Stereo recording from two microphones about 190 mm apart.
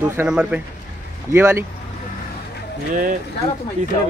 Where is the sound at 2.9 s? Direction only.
45° right (ahead or behind).